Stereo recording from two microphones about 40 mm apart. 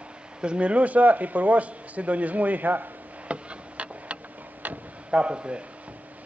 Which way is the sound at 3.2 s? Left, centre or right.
Right.